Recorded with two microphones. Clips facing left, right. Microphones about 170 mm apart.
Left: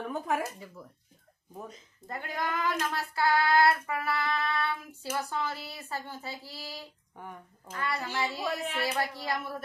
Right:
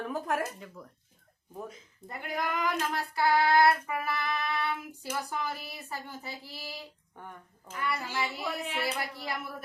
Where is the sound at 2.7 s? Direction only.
15° right (ahead or behind).